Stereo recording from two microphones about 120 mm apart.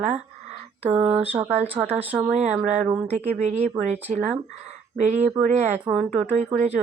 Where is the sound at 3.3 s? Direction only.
70° right (ahead or behind).